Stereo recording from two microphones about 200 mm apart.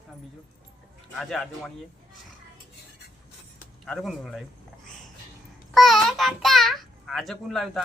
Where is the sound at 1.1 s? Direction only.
Centre (ahead or behind).